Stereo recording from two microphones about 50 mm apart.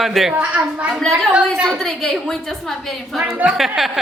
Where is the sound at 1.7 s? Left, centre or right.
Centre.